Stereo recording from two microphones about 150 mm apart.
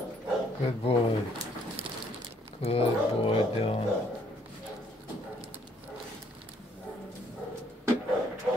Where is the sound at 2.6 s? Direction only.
40° left (ahead or behind).